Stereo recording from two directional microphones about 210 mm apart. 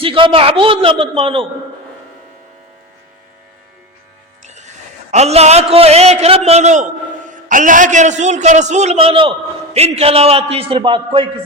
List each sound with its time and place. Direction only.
0.0 s a man's voice: 25° right (ahead or behind)
4.4 s music: 35° right (ahead or behind)
5.1 s a man's voice: 30° right (ahead or behind)